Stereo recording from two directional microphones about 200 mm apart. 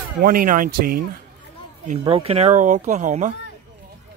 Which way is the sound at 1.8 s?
30° right (ahead or behind).